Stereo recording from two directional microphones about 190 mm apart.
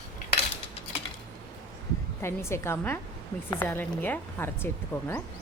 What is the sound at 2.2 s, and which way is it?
Speech, 15° left (ahead or behind).